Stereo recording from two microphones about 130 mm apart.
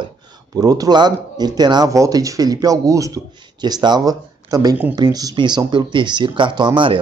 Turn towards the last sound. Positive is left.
turn(degrees=-40)  # may be behind; listen again after turning